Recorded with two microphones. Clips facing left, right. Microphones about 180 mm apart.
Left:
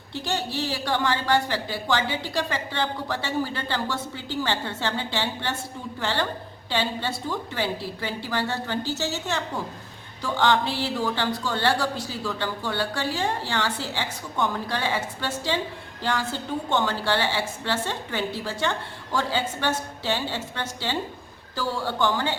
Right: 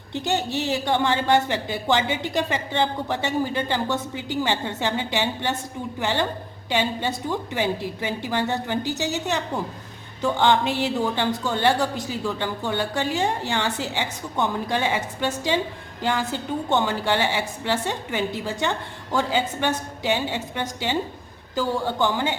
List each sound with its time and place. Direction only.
0.1 s a woman's voice: 20° right (ahead or behind)